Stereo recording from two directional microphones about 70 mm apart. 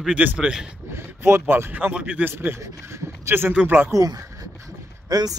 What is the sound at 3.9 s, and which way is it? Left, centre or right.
Speech, right.